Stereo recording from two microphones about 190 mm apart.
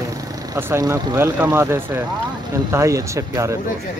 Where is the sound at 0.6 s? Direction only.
15° right (ahead or behind).